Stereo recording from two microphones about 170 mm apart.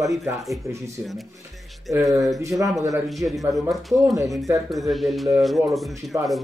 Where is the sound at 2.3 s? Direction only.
20° right (ahead or behind).